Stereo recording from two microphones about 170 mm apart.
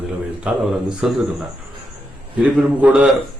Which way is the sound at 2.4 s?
10° right (ahead or behind).